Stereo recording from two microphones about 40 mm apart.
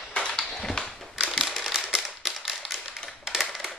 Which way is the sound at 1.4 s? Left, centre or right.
Centre.